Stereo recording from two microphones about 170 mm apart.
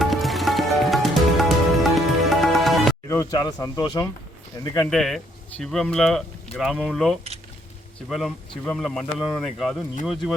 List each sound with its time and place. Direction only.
0.0 s music: centre (ahead or behind)
3.1 s speech: 20° left (ahead or behind)
4.9 s speech: centre (ahead or behind)
8.6 s speech: 5° left (ahead or behind)